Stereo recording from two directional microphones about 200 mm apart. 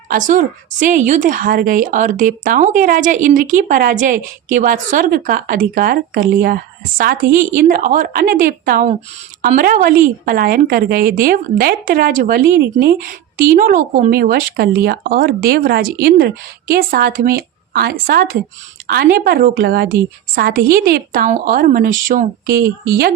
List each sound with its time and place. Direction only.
0.1 s speech: 40° right (ahead or behind)